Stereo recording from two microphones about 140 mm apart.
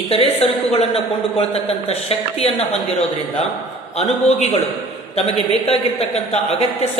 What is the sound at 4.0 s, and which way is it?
A woman's voice, 50° left (ahead or behind).